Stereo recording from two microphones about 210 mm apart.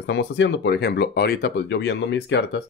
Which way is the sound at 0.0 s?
55° left (ahead or behind).